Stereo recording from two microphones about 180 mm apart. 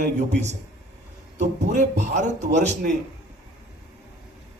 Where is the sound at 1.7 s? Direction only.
40° right (ahead or behind).